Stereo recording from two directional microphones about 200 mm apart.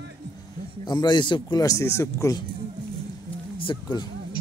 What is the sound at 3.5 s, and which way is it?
Speech, 25° left (ahead or behind).